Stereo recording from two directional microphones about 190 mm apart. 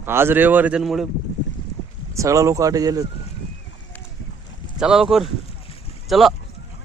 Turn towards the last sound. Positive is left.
turn(degrees=0)  # may be behind; listen again after turning